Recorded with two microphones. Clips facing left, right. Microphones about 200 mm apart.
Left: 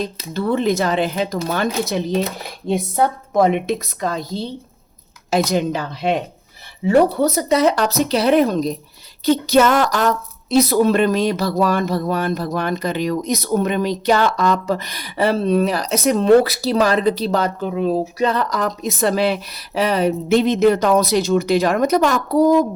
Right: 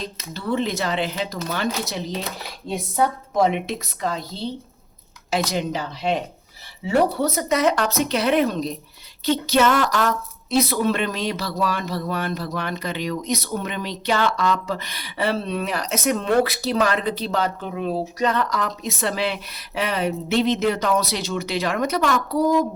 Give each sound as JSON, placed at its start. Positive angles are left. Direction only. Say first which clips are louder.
{"t": 0.3, "sound": "a woman's voice", "louder": "left 6 dB", "side_deg": 50}
{"t": 5.5, "sound": "speech", "louder": "left 5 dB", "side_deg": 50}
{"t": 7.3, "sound": "speech", "louder": "left 3 dB", "side_deg": 30}